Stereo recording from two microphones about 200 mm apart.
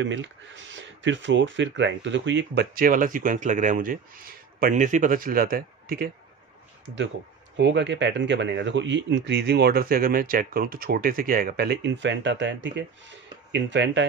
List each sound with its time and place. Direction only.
0.0 s speech: 65° right (ahead or behind); by 6.0 s 50° right (ahead or behind)
7.5 s speech: 60° right (ahead or behind)